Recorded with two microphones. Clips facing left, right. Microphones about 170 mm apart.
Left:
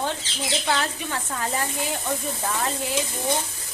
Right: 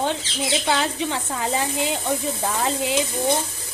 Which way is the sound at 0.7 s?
20° right (ahead or behind).